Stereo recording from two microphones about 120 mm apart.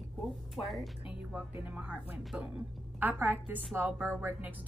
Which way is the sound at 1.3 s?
10° right (ahead or behind).